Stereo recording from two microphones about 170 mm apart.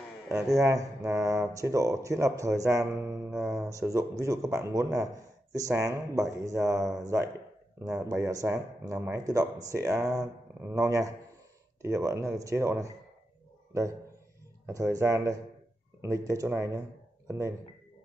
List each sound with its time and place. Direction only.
0.5 s speech: 20° right (ahead or behind)
14.7 s speech: 20° right (ahead or behind)